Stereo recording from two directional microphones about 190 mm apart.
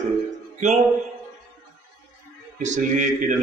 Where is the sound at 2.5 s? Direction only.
40° right (ahead or behind).